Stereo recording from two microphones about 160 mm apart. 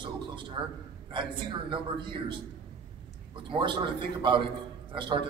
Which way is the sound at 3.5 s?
30° right (ahead or behind).